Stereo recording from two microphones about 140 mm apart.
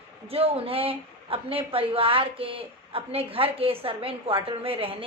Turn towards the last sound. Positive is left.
turn(degrees=-40)  # may be behind; listen again after turning